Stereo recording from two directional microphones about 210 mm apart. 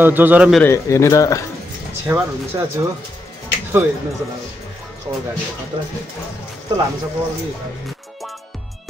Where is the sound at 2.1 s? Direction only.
15° right (ahead or behind).